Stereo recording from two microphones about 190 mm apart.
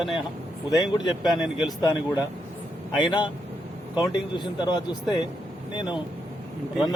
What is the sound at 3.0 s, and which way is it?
Speech, 25° left (ahead or behind).